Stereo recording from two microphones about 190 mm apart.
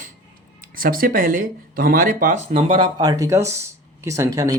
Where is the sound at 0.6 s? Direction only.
50° right (ahead or behind).